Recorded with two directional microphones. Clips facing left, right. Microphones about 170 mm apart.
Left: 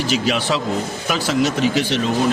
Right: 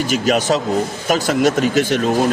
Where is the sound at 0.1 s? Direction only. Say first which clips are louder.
Right 4 dB; 45° right (ahead or behind).